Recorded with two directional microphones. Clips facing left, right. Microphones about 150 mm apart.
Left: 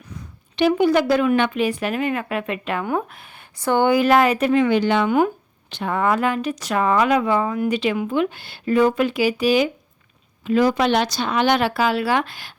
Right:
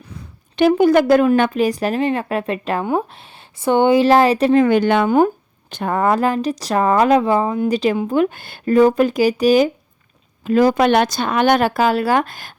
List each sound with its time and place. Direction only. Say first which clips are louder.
0.5 s a woman's voice: right 4 dB; 45° right (ahead or behind)
2.8 s a woman's voice: right 4 dB; 25° right (ahead or behind); by 12.5 s 45° right (ahead or behind)